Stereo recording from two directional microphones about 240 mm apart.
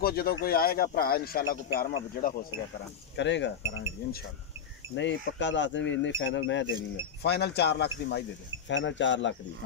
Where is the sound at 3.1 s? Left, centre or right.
Left.